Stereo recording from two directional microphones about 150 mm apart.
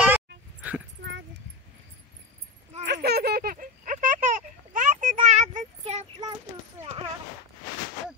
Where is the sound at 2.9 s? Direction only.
90° right; by 5.1 s 60° right (ahead or behind).